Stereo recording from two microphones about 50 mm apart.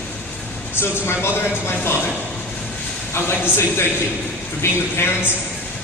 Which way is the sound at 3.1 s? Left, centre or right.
Left.